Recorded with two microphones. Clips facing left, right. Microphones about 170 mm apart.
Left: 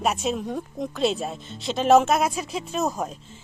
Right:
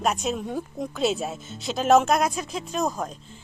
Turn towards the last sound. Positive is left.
turn(degrees=10)  # may be behind; listen again after turning